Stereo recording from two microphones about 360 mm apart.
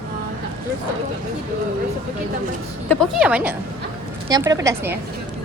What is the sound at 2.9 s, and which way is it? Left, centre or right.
A woman's voice, centre.